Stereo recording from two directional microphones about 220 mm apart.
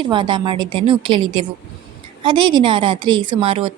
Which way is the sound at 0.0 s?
20° right (ahead or behind).